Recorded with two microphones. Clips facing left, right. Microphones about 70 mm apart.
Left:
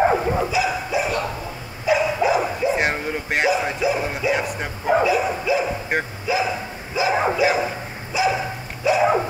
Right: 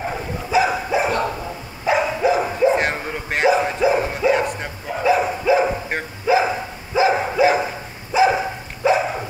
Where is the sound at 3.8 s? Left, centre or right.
Right.